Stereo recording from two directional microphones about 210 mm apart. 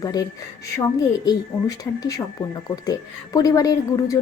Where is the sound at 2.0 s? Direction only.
20° left (ahead or behind).